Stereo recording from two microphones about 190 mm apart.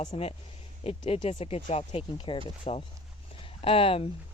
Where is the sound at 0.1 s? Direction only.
30° left (ahead or behind).